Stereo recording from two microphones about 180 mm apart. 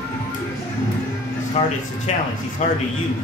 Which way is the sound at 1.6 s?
30° left (ahead or behind).